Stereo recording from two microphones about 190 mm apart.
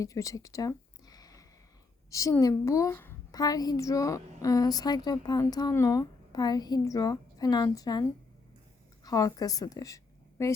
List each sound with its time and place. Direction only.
0.0 s a sound: 15° left (ahead or behind)
2.0 s a woman's voice: 15° left (ahead or behind)
9.0 s a woman's voice: 20° left (ahead or behind)